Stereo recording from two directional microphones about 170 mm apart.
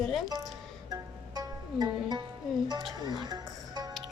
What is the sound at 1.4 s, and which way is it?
Music, 25° right (ahead or behind).